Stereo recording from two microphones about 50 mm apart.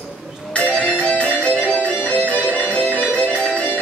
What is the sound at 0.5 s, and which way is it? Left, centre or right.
Music, left.